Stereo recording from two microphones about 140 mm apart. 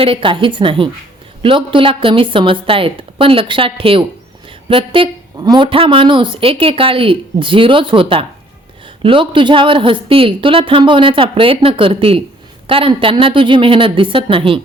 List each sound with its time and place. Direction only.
0.0 s a woman's voice: 40° right (ahead or behind)